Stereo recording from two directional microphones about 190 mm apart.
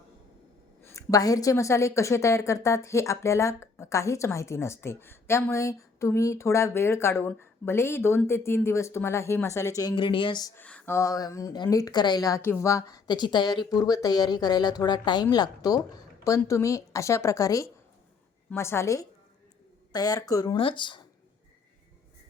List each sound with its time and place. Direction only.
0.8 s a woman's voice: 15° left (ahead or behind)
10.5 s a woman's voice: 10° left (ahead or behind); by 21.0 s 25° left (ahead or behind)